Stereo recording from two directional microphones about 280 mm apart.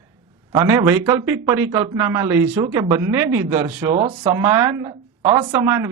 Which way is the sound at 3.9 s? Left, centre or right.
Right.